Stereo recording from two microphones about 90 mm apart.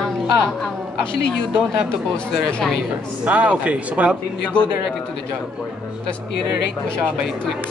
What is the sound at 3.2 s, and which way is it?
Speech, 15° right (ahead or behind).